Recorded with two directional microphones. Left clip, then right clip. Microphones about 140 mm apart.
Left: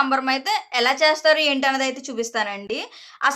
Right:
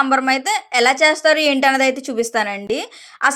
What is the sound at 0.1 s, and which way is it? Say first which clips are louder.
A woman's voice: right 4 dB; 35° right (ahead or behind).